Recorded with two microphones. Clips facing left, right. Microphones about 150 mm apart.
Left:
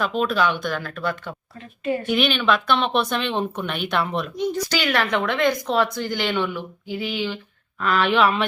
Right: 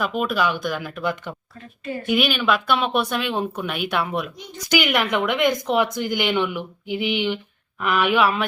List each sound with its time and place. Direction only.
0.0 s speech: 10° right (ahead or behind)